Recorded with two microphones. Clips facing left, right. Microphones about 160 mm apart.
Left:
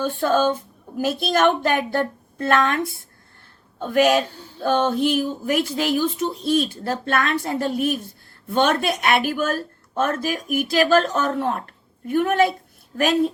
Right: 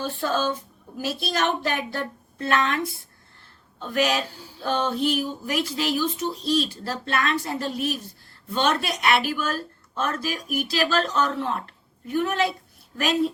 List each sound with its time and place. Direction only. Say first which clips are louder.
0.0 s a woman's voice: left 6 dB; 50° left (ahead or behind)